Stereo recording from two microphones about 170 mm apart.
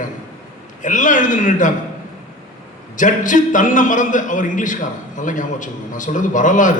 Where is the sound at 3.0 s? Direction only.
50° left (ahead or behind).